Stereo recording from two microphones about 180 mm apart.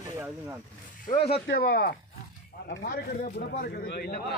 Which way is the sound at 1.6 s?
55° left (ahead or behind).